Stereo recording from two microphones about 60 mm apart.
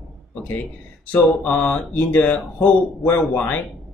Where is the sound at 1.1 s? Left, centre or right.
Left.